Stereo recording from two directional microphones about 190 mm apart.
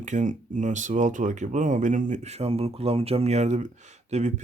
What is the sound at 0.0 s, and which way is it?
Speech, 40° right (ahead or behind).